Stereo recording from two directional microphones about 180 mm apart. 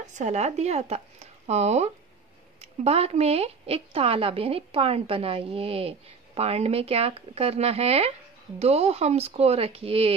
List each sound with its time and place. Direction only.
0.0 s speech: 40° right (ahead or behind)